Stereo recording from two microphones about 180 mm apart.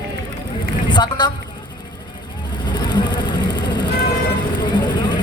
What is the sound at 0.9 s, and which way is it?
Speech, 25° left (ahead or behind).